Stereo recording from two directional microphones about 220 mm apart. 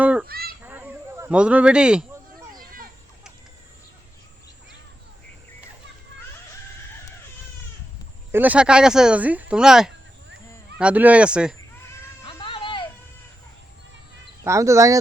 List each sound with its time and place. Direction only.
0.0 s goose: 5° right (ahead or behind)
0.3 s goose: 45° right (ahead or behind)
0.6 s a sound: 10° right (ahead or behind)
2.5 s children playing: 40° right (ahead or behind)
8.3 s speech: 5° right (ahead or behind)
12.2 s a sound: 25° left (ahead or behind)
14.4 s speech: 15° right (ahead or behind)